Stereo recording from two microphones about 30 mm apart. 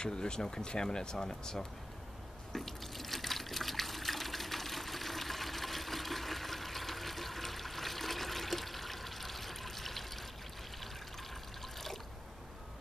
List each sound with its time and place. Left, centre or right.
0.0 s speech: left
2.5 s water: centre